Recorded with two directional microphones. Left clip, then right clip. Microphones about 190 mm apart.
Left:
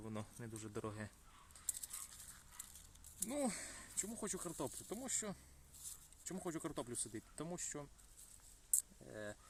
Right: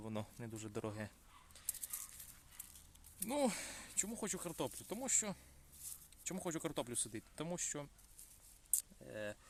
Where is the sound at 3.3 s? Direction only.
25° right (ahead or behind).